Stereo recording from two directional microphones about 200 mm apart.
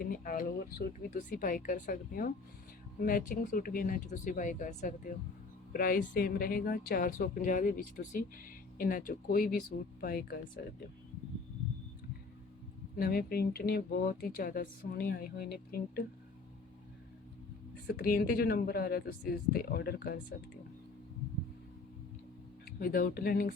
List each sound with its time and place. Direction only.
0.0 s speech: 45° left (ahead or behind)
13.0 s speech: 50° left (ahead or behind)
17.8 s speech: 50° left (ahead or behind)
22.6 s speech: 45° left (ahead or behind)